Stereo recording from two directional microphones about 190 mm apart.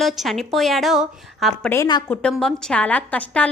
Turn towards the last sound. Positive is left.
turn(degrees=5)  # may be behind; listen again after turning